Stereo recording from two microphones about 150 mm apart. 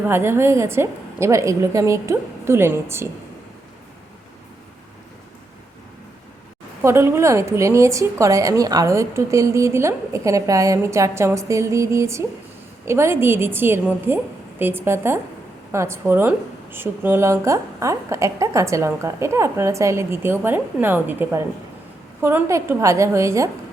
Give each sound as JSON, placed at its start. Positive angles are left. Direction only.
{"t": 0.1, "sound": "a woman's voice", "side_deg": -15}
{"t": 6.8, "sound": "a woman's voice", "side_deg": -15}